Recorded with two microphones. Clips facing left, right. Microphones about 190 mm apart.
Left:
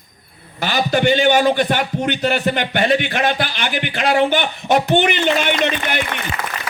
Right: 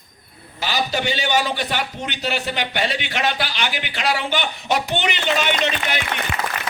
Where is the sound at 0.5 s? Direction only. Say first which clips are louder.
Left 5 dB; 55° left (ahead or behind).